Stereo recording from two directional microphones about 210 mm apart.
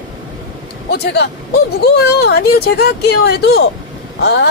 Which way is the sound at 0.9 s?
50° left (ahead or behind).